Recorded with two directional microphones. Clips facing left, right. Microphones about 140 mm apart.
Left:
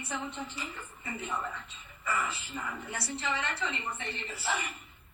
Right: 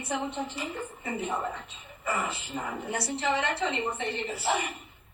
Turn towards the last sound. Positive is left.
turn(degrees=-25)  # may be behind; listen again after turning